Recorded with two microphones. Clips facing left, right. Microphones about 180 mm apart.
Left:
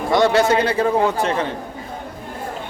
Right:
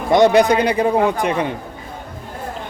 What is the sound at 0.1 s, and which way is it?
Speech, 15° right (ahead or behind).